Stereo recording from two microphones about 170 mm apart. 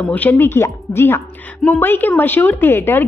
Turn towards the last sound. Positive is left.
turn(degrees=15)  # may be behind; listen again after turning